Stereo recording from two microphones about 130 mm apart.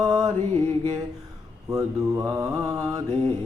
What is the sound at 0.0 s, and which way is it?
Mantra, 30° right (ahead or behind).